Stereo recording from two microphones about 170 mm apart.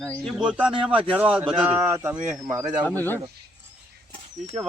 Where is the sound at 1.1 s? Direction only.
5° right (ahead or behind).